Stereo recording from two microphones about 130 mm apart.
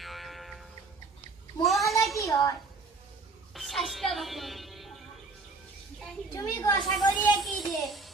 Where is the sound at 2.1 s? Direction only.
25° left (ahead or behind).